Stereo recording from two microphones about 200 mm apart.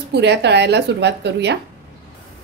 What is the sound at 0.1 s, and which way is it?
A woman's voice, 60° right (ahead or behind).